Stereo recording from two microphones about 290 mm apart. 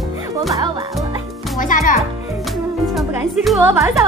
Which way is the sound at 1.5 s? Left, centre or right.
Left.